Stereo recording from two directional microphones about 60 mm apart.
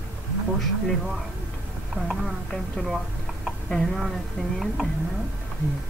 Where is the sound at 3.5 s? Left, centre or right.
Centre.